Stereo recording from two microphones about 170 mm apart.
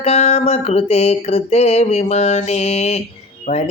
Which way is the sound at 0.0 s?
40° left (ahead or behind).